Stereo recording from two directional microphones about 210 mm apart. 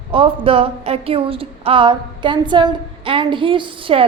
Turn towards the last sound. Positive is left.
turn(degrees=-25)  # may be behind; listen again after turning